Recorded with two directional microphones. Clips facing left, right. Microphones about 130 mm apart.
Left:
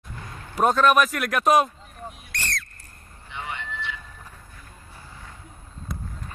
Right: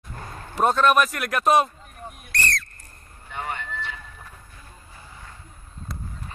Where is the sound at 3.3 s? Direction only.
45° right (ahead or behind).